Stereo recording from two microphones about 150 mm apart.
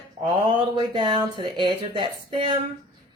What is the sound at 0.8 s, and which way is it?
Speech, 35° right (ahead or behind).